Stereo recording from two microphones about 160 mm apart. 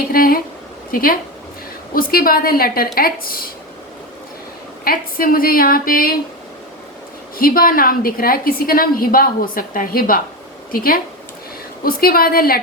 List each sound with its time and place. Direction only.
0.1 s a sound: 65° left (ahead or behind)
0.9 s a woman's voice: 65° left (ahead or behind)
4.9 s a woman's voice: 65° left (ahead or behind)
7.3 s a woman's voice: 65° left (ahead or behind)